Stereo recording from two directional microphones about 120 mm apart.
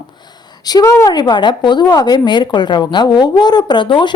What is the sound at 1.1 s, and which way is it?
A woman's voice, 40° left (ahead or behind).